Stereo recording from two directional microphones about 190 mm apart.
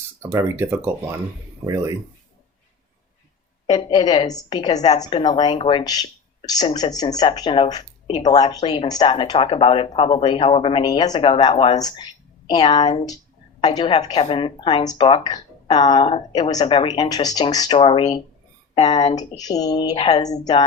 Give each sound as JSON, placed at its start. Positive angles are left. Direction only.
{"t": 0.2, "sound": "speech", "side_deg": -15}
{"t": 3.7, "sound": "speech", "side_deg": 25}